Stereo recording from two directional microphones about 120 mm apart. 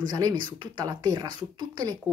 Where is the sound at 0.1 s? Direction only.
35° right (ahead or behind).